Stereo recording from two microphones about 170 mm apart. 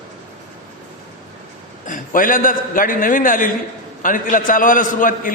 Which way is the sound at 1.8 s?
50° left (ahead or behind).